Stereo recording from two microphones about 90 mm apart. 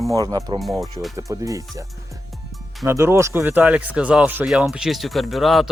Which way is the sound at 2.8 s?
30° right (ahead or behind).